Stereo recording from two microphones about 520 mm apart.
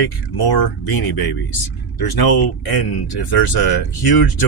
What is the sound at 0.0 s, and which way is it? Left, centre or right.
Speech, left.